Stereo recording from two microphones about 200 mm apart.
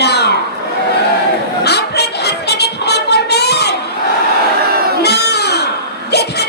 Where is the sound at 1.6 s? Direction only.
55° left (ahead or behind).